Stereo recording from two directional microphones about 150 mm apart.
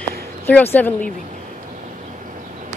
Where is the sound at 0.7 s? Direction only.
10° left (ahead or behind).